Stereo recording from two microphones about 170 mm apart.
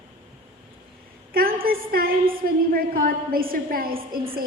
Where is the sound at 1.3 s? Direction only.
60° right (ahead or behind).